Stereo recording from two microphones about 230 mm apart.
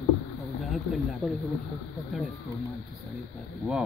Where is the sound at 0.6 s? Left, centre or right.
Centre.